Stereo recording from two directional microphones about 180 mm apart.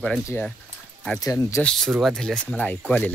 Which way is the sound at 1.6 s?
5° left (ahead or behind).